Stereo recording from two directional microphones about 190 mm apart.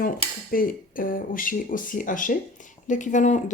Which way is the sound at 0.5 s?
50° left (ahead or behind).